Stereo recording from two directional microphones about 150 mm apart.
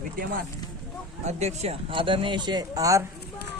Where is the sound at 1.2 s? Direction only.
50° right (ahead or behind); by 3.1 s 20° right (ahead or behind).